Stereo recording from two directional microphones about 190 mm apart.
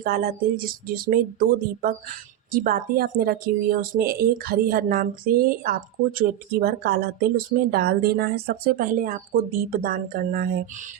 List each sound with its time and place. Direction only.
0.0 s speech: 50° right (ahead or behind)